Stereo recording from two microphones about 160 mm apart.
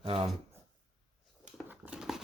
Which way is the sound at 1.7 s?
5° right (ahead or behind).